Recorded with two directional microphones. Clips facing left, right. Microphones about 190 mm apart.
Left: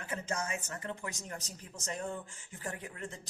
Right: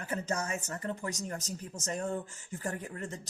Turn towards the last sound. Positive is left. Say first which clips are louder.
# right 4 dB
turn(degrees=-45)  # may be behind; listen again after turning